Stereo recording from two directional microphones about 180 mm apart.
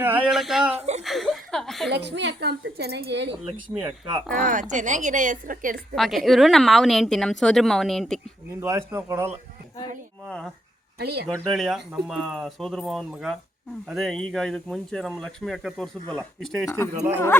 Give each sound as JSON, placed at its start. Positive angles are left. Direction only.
{"t": 0.0, "sound": "speech", "side_deg": -10}
{"t": 0.7, "sound": "speech", "side_deg": -35}
{"t": 1.0, "sound": "speech", "side_deg": 0}
{"t": 1.9, "sound": "a woman's voice", "side_deg": -70}
{"t": 4.4, "sound": "a woman's voice", "side_deg": -50}
{"t": 5.9, "sound": "speech", "side_deg": 0}
{"t": 8.6, "sound": "speech", "side_deg": -15}
{"t": 10.2, "sound": "speech", "side_deg": 5}
{"t": 11.0, "sound": "speech", "side_deg": -65}
{"t": 11.4, "sound": "speech", "side_deg": 0}